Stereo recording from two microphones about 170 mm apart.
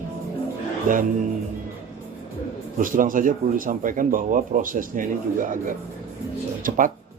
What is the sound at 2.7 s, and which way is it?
Speech, 50° right (ahead or behind).